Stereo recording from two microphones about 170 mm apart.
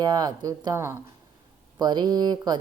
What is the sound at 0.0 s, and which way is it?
Speech, 25° right (ahead or behind).